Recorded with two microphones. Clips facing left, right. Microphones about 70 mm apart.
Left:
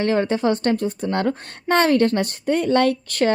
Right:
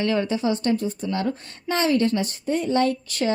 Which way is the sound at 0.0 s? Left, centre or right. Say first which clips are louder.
Left 3 dB; left.